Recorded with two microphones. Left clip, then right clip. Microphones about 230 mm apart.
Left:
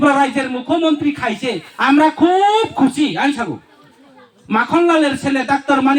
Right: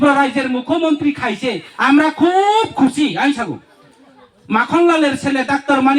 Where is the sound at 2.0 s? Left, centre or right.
Right.